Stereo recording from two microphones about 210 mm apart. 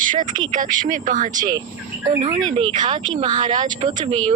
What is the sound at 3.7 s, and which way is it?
Speech, 35° right (ahead or behind).